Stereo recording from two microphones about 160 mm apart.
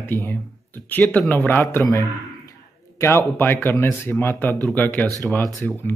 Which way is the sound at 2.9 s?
15° left (ahead or behind).